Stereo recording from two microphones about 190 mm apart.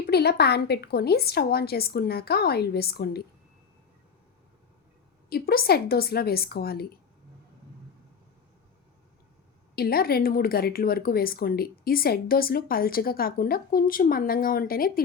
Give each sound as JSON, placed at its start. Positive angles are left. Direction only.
{"t": 0.0, "sound": "a woman's voice", "side_deg": 55}
{"t": 5.3, "sound": "a woman's voice", "side_deg": 55}
{"t": 9.7, "sound": "speech", "side_deg": 55}